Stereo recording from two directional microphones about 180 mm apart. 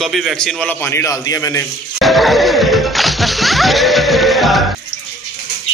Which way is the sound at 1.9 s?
Centre (ahead or behind).